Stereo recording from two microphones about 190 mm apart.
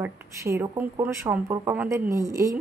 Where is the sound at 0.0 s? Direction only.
15° right (ahead or behind).